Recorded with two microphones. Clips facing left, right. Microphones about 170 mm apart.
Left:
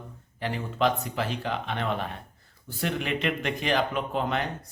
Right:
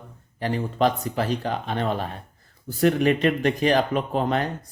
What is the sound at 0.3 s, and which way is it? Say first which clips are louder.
Speech: right 5 dB; 40° right (ahead or behind).